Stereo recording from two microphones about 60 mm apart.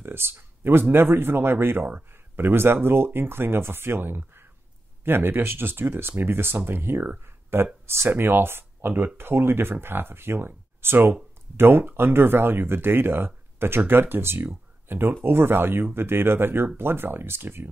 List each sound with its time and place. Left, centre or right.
0.0 s speech: right